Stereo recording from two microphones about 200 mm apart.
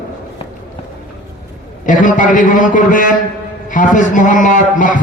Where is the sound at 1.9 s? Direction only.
40° left (ahead or behind).